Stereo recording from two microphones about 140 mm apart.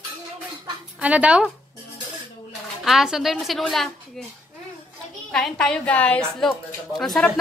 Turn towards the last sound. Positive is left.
turn(degrees=5)  # may be behind; listen again after turning